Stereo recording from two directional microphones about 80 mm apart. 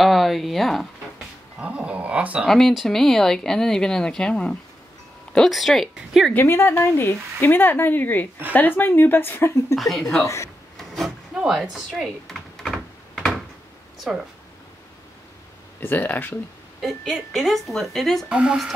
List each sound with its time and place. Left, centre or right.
0.0 s speech: centre
1.6 s speech: centre
2.4 s speech: centre
6.3 s speech: left
9.8 s speech: centre
10.2 s speech: left
10.8 s a sound: centre
14.1 s speech: centre
15.8 s speech: left
17.1 s speech: centre
18.3 s speech: centre